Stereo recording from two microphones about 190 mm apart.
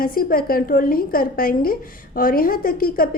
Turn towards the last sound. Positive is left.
turn(degrees=50)  # may be behind; listen again after turning